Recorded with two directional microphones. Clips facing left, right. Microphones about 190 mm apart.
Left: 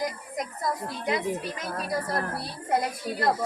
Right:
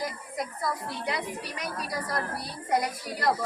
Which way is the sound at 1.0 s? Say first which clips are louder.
Left 6 dB; 20° left (ahead or behind).